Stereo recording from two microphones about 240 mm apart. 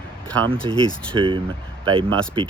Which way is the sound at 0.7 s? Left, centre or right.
Centre.